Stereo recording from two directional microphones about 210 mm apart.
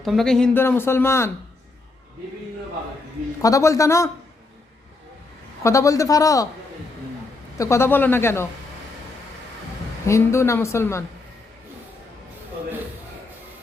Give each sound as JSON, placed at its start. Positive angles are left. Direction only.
{"t": 0.0, "sound": "a man's voice", "side_deg": 0}
{"t": 3.4, "sound": "a man's voice", "side_deg": 15}
{"t": 5.6, "sound": "a man's voice", "side_deg": 15}
{"t": 7.6, "sound": "a man's voice", "side_deg": 15}
{"t": 10.1, "sound": "a man's voice", "side_deg": 15}